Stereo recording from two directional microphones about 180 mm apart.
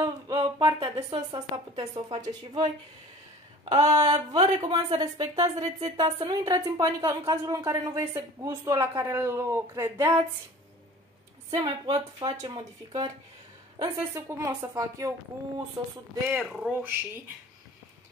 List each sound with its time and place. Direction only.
0.0 s a sound: 20° right (ahead or behind)
1.1 s speech: 25° right (ahead or behind)
3.6 s a sound: 35° right (ahead or behind)
4.1 s a woman's voice: 25° right (ahead or behind)
11.5 s a woman's voice: 25° right (ahead or behind)
16.3 s a woman's voice: 5° right (ahead or behind)